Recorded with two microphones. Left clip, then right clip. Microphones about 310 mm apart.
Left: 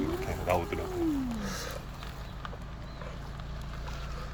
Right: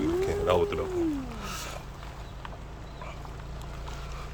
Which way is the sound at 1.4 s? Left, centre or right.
Centre.